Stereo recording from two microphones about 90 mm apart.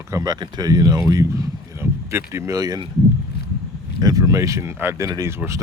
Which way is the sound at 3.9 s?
45° right (ahead or behind).